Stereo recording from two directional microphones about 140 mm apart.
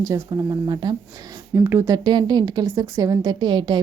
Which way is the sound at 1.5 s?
20° right (ahead or behind).